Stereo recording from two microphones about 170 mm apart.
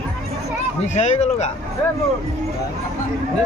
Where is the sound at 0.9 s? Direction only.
40° left (ahead or behind).